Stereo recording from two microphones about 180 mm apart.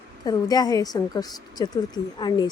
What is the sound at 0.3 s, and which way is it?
A woman's voice, 20° left (ahead or behind).